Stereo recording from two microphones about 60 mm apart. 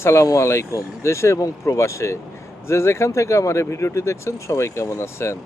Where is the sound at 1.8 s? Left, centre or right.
Left.